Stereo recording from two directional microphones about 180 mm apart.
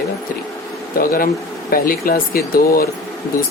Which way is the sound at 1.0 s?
55° left (ahead or behind).